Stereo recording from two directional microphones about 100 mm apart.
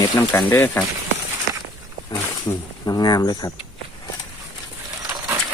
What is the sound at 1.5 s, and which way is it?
Walk, 35° right (ahead or behind).